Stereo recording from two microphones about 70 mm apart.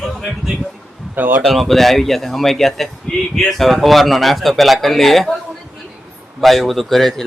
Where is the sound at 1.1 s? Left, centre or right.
Right.